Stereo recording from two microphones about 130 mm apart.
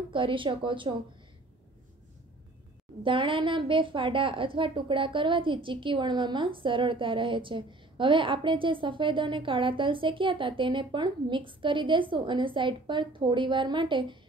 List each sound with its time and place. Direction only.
0.1 s a woman's voice: 40° right (ahead or behind)
3.0 s a woman's voice: 40° right (ahead or behind)